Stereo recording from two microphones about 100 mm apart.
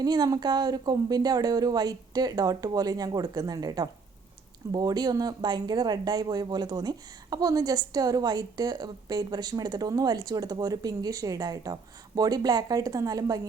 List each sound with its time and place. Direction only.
0.0 s speech: 40° right (ahead or behind)